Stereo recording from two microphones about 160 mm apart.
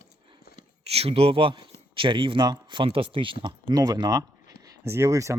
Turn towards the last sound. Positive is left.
turn(degrees=-20)  # may be behind; listen again after turning